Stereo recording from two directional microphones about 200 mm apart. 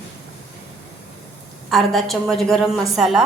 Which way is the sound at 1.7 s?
Centre (ahead or behind).